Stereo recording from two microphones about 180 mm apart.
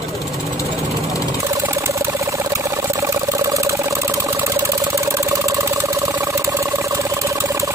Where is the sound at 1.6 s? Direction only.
15° right (ahead or behind).